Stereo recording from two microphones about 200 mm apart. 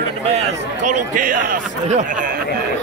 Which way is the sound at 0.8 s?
40° right (ahead or behind).